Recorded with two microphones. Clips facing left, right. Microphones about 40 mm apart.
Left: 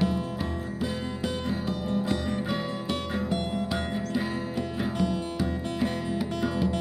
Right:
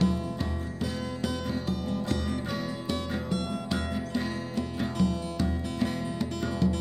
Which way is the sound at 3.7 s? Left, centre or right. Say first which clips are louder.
Left 2 dB; centre.